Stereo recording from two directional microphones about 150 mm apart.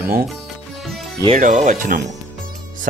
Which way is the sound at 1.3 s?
55° right (ahead or behind).